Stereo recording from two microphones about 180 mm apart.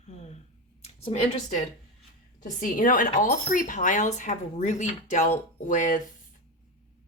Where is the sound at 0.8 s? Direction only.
35° left (ahead or behind).